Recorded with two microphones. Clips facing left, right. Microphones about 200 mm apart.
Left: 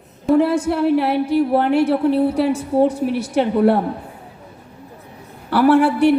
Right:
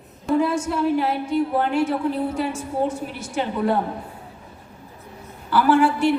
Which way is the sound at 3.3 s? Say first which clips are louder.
Left 6 dB; 65° left (ahead or behind).